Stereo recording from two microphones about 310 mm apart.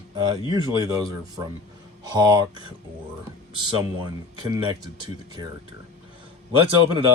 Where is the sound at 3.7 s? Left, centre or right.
Centre.